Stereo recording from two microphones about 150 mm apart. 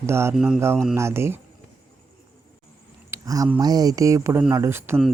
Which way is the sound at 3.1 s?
20° right (ahead or behind).